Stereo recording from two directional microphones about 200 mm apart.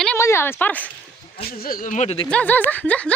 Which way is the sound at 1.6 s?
45° left (ahead or behind).